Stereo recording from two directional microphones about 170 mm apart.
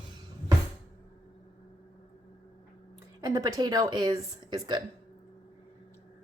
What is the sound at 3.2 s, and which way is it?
A woman's voice, 20° right (ahead or behind).